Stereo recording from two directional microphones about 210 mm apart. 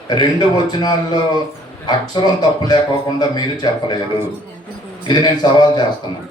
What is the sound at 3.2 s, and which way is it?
A man's voice, 20° left (ahead or behind).